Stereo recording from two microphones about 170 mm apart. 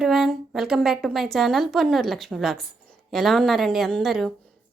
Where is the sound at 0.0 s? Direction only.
Centre (ahead or behind).